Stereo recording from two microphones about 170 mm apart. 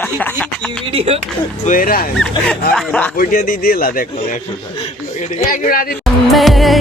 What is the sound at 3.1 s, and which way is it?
A man's voice, 55° left (ahead or behind).